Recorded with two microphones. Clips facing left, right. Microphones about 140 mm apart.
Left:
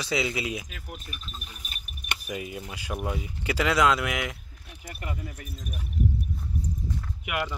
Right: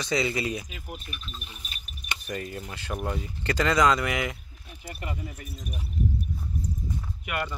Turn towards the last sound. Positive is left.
turn(degrees=5)  # may be behind; listen again after turning